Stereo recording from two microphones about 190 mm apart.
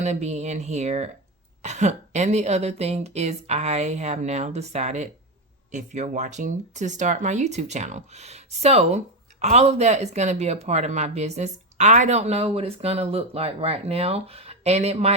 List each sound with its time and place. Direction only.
0.0 s speech: 35° right (ahead or behind)